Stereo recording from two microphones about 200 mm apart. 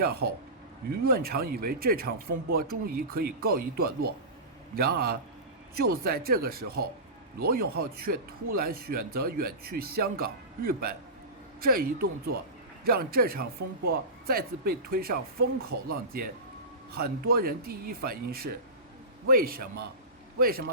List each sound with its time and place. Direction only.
0.0 s speech: 50° right (ahead or behind)